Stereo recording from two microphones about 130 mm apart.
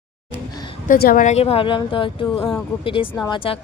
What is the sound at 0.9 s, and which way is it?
Speech, 80° left.